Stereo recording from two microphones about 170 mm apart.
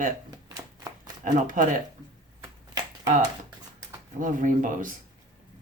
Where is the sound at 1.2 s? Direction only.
50° right (ahead or behind).